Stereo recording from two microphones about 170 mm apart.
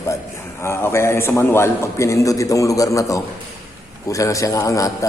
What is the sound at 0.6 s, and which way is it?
A man's voice, 15° left (ahead or behind).